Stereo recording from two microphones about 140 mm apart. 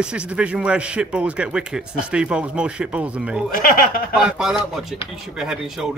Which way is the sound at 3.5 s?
90° left.